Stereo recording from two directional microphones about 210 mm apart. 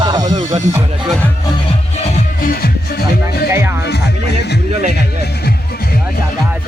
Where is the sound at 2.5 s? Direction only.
45° left (ahead or behind).